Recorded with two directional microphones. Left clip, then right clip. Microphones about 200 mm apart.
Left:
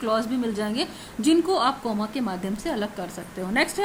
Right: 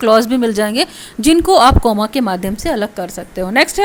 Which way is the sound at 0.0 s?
50° right (ahead or behind).